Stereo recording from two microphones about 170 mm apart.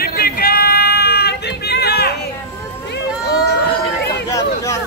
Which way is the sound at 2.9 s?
75° left (ahead or behind).